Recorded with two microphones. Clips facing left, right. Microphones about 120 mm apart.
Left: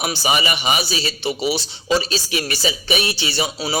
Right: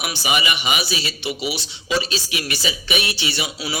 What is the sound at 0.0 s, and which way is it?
Speech, 35° left (ahead or behind).